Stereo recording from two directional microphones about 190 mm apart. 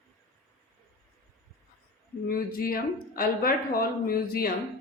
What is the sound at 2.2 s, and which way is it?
Speech, 50° left (ahead or behind).